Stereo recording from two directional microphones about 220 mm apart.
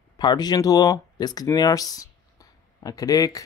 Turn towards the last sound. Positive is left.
turn(degrees=15)  # may be behind; listen again after turning